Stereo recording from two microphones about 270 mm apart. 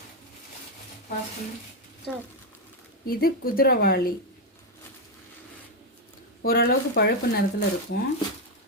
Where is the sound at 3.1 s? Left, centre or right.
Left.